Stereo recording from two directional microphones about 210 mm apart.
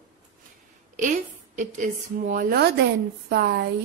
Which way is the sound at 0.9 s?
35° right (ahead or behind).